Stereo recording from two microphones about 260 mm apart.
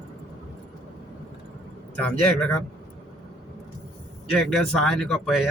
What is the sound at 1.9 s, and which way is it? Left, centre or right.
Speech, centre.